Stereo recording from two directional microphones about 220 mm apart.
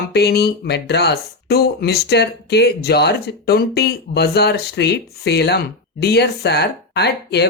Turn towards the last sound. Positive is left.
turn(degrees=50)  # may be behind; listen again after turning